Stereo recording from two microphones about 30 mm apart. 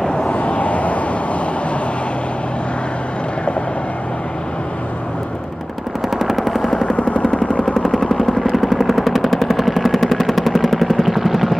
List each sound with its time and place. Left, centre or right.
0.1 s vehicle: left
0.4 s vehicle: left
6.0 s vehicle: centre
7.0 s vehicle: left
7.3 s vehicle: left
7.7 s vehicle: centre
8.5 s gunshot: centre